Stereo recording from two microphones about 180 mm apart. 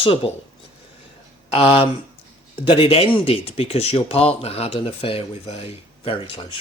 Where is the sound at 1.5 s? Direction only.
30° left (ahead or behind).